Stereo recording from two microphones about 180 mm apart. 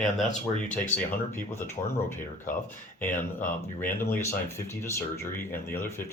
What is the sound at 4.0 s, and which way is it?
Speech, 15° left (ahead or behind).